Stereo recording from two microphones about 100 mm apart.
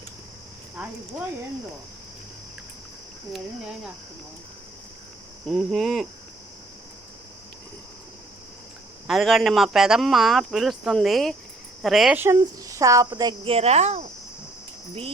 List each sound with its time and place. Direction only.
3.3 s speech: 5° right (ahead or behind)
5.5 s speech: 5° left (ahead or behind)
9.0 s speech: centre (ahead or behind)
12.1 s speech: 25° right (ahead or behind)
12.4 s speech: 35° right (ahead or behind)
13.4 s speech: 80° right